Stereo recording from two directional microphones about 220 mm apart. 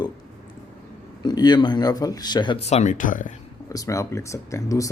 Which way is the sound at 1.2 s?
20° left (ahead or behind).